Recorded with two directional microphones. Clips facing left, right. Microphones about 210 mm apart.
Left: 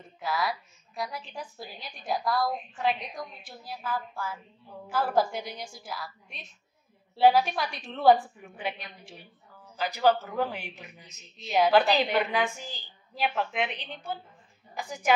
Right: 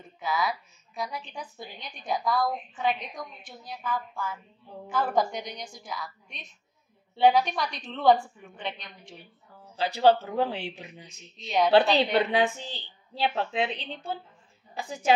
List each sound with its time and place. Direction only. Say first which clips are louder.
0.2 s a woman's voice: right 1 dB; centre (ahead or behind)
9.8 s speech: right 3 dB; 30° right (ahead or behind)
11.3 s a woman's voice: even; 5° left (ahead or behind)
11.7 s a woman's voice: right 5 dB; 30° right (ahead or behind)